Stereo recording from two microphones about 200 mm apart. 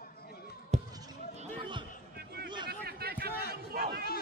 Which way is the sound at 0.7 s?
35° right (ahead or behind).